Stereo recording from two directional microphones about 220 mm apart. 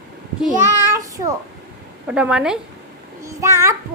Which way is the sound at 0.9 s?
15° right (ahead or behind).